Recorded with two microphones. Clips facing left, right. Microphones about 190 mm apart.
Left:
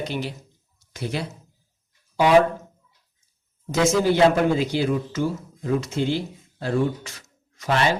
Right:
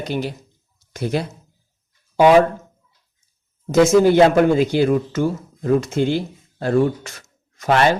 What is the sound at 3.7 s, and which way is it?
Speech, 50° right (ahead or behind).